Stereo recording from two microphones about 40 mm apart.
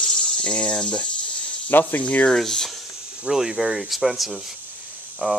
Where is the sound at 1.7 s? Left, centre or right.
Left.